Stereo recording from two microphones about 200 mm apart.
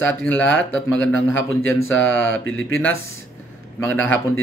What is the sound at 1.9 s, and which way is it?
Speech, 75° left (ahead or behind).